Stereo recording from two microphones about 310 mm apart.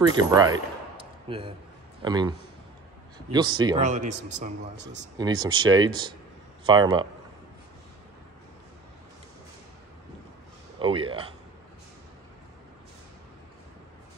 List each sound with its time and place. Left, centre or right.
0.0 s a man's voice: centre
10.8 s a man's voice: centre